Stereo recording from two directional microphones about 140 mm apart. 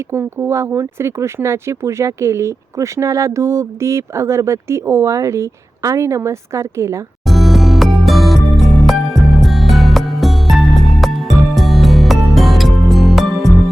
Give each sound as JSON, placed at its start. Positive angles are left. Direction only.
{"t": 0.1, "sound": "speech", "side_deg": -15}
{"t": 7.3, "sound": "music", "side_deg": 0}